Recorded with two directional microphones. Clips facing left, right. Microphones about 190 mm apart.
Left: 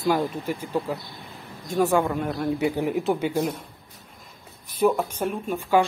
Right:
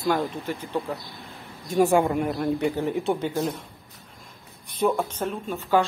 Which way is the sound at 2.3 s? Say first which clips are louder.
Even; 5° left (ahead or behind).